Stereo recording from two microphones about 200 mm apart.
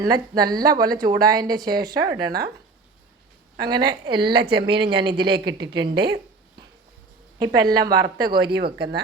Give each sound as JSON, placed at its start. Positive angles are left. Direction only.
{"t": 0.0, "sound": "speech", "side_deg": -20}
{"t": 2.2, "sound": "speech", "side_deg": -50}
{"t": 3.6, "sound": "speech", "side_deg": -20}
{"t": 7.3, "sound": "speech", "side_deg": -20}
{"t": 8.4, "sound": "speech", "side_deg": -55}